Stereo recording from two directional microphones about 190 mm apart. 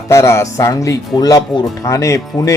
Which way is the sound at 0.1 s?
15° left (ahead or behind).